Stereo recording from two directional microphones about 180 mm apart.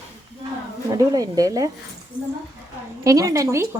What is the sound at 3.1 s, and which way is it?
Speech, 20° right (ahead or behind).